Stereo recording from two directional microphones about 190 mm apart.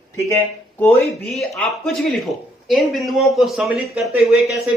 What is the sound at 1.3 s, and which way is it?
Speech, centre (ahead or behind).